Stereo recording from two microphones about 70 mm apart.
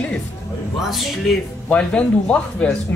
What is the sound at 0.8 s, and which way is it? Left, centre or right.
Speech, centre.